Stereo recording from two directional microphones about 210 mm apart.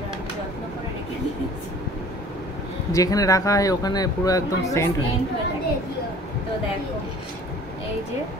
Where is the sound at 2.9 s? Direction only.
15° left (ahead or behind).